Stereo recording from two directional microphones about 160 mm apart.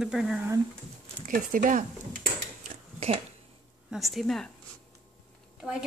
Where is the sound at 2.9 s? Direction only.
40° right (ahead or behind).